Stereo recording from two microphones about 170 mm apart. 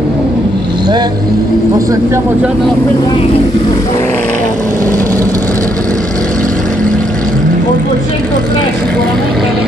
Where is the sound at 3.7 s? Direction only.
15° left (ahead or behind).